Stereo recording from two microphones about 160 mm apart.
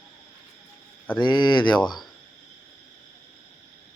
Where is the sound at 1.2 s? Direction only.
30° left (ahead or behind).